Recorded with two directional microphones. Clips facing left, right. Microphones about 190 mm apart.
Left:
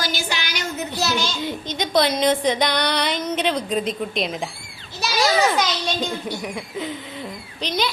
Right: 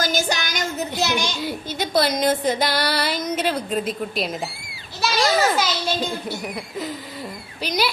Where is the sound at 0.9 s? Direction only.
15° right (ahead or behind).